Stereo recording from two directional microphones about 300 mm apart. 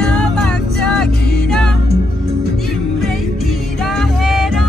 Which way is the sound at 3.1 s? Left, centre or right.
Centre.